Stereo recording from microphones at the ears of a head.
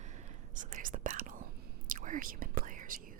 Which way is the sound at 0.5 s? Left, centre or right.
Right.